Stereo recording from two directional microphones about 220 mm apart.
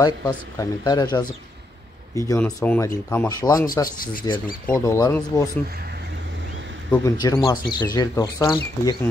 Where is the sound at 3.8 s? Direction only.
40° left (ahead or behind).